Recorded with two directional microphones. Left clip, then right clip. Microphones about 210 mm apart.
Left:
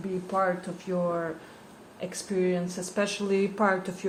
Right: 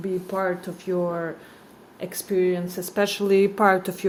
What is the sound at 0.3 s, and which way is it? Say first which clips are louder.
Speech: left 2 dB; 45° right (ahead or behind).